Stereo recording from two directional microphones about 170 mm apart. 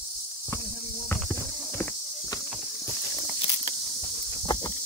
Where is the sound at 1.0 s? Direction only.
10° left (ahead or behind).